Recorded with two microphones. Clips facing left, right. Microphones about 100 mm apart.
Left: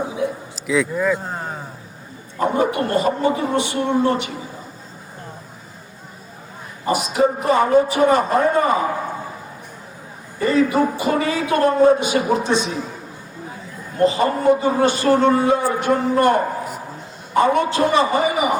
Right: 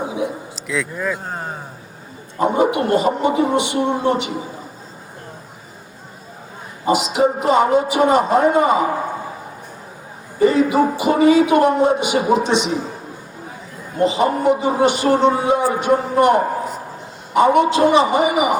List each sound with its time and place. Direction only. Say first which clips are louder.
0.7 s speech: left 4 dB; centre (ahead or behind)
1.1 s a sound: left 2 dB; 10° right (ahead or behind)
2.4 s speech: right 2 dB; 20° right (ahead or behind)
6.8 s speech: right 2 dB; 20° right (ahead or behind)
10.4 s speech: right 3 dB; 20° right (ahead or behind)
14.0 s speech: even; 20° right (ahead or behind)